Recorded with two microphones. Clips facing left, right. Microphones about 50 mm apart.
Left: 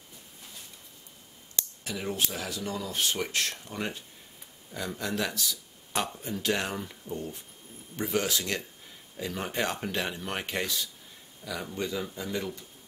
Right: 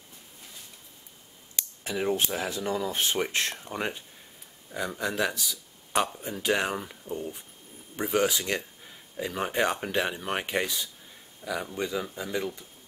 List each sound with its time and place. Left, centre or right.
1.9 s speech: right